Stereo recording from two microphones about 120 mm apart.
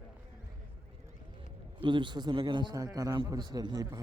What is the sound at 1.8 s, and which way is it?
A man's voice, 40° right (ahead or behind).